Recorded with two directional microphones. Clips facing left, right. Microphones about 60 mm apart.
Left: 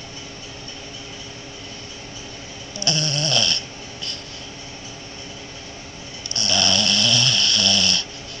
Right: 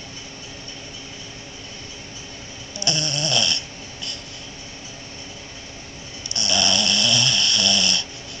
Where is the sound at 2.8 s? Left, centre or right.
Right.